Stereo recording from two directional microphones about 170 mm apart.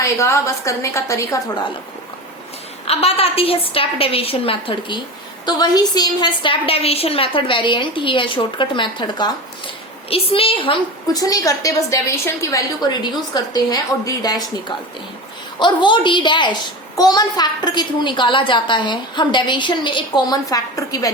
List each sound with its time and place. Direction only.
0.0 s a woman's voice: 15° left (ahead or behind)
2.8 s a woman's voice: 35° left (ahead or behind)
15.5 s a child's voice: 25° left (ahead or behind)